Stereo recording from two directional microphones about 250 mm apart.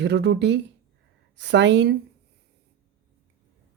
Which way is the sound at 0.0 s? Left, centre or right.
Right.